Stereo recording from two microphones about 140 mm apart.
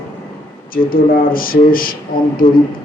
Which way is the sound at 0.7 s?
90° left.